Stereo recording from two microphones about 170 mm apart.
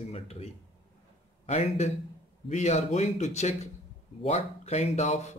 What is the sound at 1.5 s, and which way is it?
Speech, 40° left (ahead or behind).